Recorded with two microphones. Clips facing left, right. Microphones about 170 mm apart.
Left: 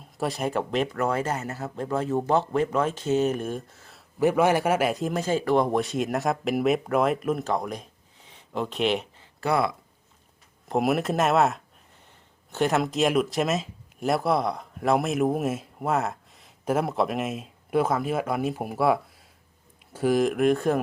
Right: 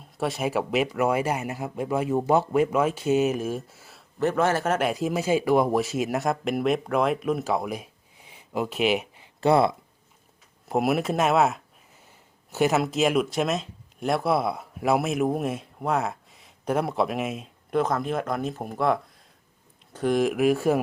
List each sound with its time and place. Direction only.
0.0 s speech: centre (ahead or behind)
4.2 s a man's voice: 10° left (ahead or behind); by 9.3 s 10° right (ahead or behind)
9.4 s speech: 25° right (ahead or behind)
10.7 s a man's voice: centre (ahead or behind)